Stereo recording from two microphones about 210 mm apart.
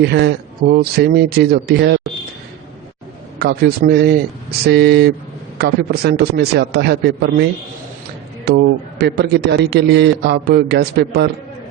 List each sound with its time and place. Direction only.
0.0 s a man's voice: 50° right (ahead or behind)
3.3 s a man's voice: 50° right (ahead or behind)
8.4 s a man's voice: 50° right (ahead or behind)